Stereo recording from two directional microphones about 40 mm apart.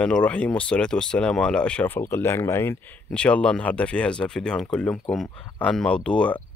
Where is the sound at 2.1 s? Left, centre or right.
Left.